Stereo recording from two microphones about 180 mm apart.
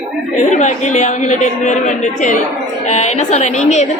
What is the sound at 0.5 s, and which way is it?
A woman's voice, 40° left (ahead or behind).